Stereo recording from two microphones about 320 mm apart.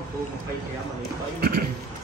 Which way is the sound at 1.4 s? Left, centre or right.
Right.